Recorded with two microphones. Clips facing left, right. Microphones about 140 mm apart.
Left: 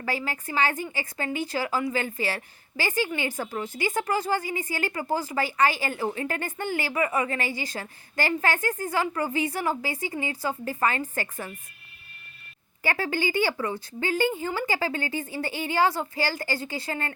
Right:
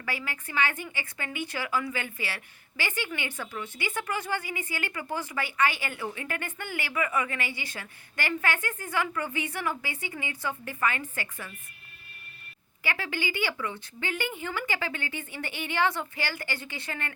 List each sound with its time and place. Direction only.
0.0 s a woman's voice: 40° left (ahead or behind)
12.8 s a woman's voice: 40° left (ahead or behind)